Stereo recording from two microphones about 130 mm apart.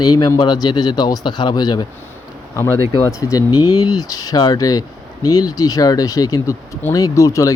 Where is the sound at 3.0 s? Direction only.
25° left (ahead or behind).